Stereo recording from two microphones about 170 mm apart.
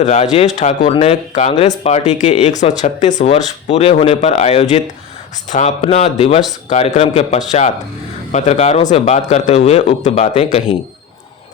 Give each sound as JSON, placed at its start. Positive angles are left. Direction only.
{"t": 0.0, "sound": "speech", "side_deg": 40}